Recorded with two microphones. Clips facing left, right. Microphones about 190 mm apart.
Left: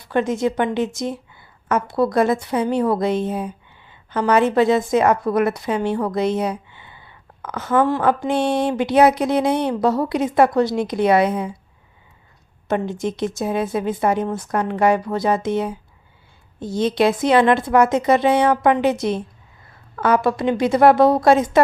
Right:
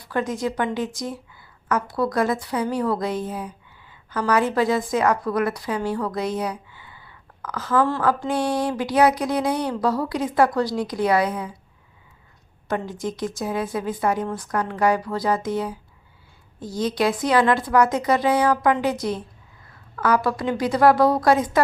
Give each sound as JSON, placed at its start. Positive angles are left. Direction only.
{"t": 0.0, "sound": "a woman's voice", "side_deg": 25}
{"t": 12.6, "sound": "a woman's voice", "side_deg": 25}